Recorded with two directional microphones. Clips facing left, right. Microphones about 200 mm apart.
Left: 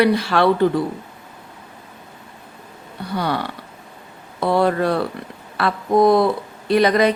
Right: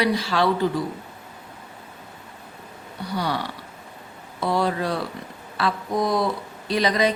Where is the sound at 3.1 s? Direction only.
55° left (ahead or behind).